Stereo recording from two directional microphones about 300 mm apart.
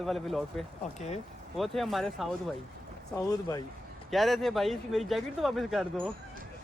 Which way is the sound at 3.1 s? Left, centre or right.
Centre.